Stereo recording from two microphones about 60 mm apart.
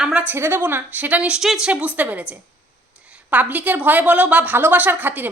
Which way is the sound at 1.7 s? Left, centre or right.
Right.